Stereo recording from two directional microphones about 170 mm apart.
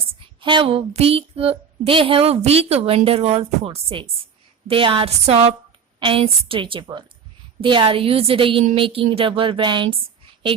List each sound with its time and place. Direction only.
0.4 s a woman's voice: 30° right (ahead or behind)